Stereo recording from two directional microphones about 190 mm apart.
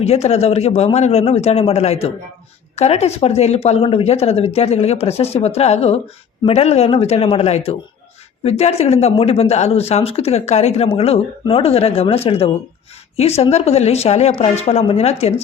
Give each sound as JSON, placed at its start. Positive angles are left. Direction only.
{"t": 0.0, "sound": "speech", "side_deg": 35}